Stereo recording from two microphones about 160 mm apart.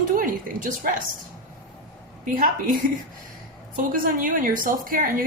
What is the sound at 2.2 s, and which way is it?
Speech, 60° right (ahead or behind).